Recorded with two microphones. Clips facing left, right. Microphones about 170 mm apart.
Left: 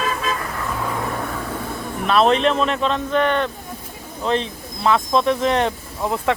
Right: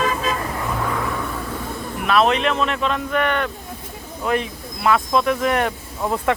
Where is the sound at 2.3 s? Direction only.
35° left (ahead or behind).